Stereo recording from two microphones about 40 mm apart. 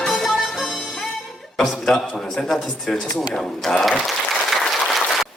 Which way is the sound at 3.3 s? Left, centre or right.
Centre.